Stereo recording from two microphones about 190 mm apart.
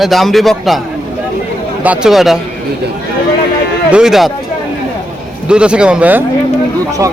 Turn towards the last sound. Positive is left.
turn(degrees=-20)  # may be behind; listen again after turning